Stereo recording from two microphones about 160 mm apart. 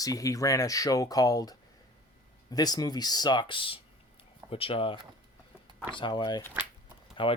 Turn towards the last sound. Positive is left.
turn(degrees=30)  # may be behind; listen again after turning